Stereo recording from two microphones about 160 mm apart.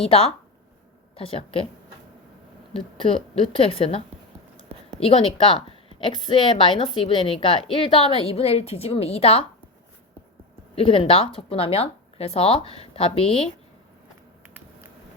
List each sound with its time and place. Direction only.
0.0 s speech: 35° left (ahead or behind)
2.7 s speech: 35° left (ahead or behind)
10.8 s speech: 35° left (ahead or behind)